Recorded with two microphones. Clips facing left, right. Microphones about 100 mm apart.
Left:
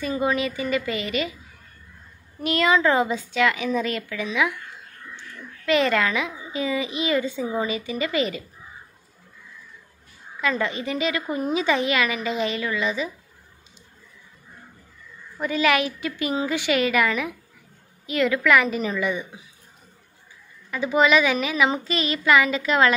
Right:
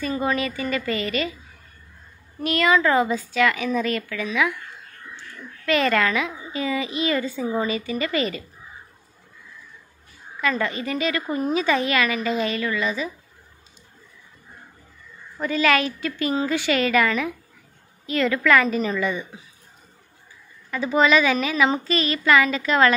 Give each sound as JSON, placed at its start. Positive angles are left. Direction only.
{"t": 0.0, "sound": "a woman's voice", "side_deg": 15}
{"t": 2.4, "sound": "a woman's voice", "side_deg": 20}
{"t": 5.7, "sound": "a woman's voice", "side_deg": 15}
{"t": 10.4, "sound": "a woman's voice", "side_deg": 20}
{"t": 15.3, "sound": "a woman's voice", "side_deg": 15}
{"t": 20.7, "sound": "a woman's voice", "side_deg": 10}